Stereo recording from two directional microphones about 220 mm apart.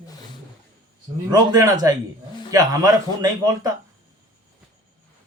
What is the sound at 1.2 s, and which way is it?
A man's voice, 15° right (ahead or behind).